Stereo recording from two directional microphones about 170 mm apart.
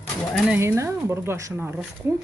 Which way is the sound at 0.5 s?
15° right (ahead or behind).